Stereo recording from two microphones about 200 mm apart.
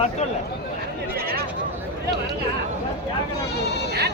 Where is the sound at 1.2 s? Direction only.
50° right (ahead or behind).